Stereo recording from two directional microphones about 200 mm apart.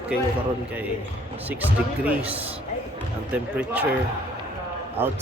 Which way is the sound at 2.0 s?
10° right (ahead or behind).